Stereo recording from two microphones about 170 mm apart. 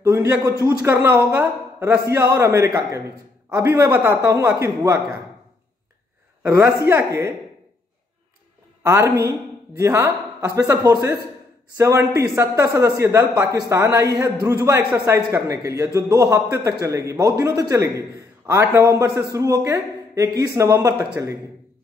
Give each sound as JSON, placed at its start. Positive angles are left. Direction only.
{"t": 0.0, "sound": "a man's voice", "side_deg": -15}
{"t": 6.4, "sound": "a man's voice", "side_deg": -15}
{"t": 8.8, "sound": "a man's voice", "side_deg": -15}